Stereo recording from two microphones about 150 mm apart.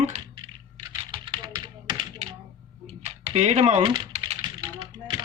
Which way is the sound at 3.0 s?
50° right (ahead or behind).